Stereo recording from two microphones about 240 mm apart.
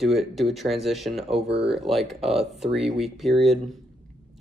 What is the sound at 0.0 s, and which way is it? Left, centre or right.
Speech, centre.